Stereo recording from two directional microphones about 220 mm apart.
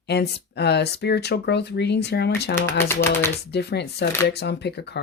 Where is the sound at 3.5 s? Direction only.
50° left (ahead or behind).